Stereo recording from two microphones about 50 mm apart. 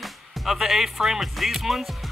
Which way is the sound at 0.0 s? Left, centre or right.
Centre.